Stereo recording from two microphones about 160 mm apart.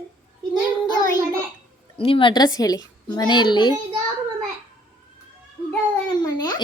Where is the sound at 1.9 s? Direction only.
35° left (ahead or behind).